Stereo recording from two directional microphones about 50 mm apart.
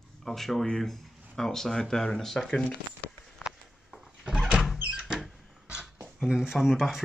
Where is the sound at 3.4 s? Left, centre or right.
Centre.